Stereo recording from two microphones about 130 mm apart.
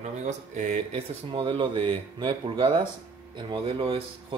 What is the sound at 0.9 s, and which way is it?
Speech, 45° right (ahead or behind).